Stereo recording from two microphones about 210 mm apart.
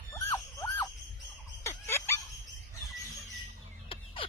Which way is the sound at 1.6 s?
15° left (ahead or behind).